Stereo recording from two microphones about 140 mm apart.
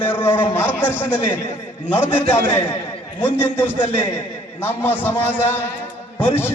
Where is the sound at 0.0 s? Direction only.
15° left (ahead or behind).